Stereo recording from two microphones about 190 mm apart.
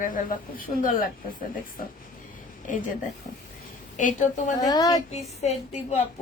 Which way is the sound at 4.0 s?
45° left (ahead or behind).